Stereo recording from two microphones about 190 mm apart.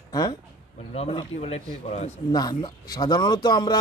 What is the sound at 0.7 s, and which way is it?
Speech, 30° left (ahead or behind).